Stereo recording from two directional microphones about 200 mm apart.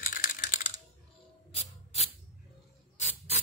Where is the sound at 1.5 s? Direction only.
30° left (ahead or behind).